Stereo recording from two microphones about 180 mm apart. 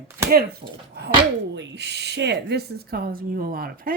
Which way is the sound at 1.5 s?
75° right (ahead or behind).